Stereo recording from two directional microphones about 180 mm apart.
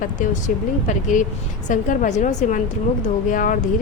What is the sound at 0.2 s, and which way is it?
A woman's voice, 45° left (ahead or behind).